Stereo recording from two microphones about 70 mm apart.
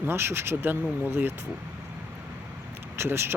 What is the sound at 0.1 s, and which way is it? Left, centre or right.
Speech, right.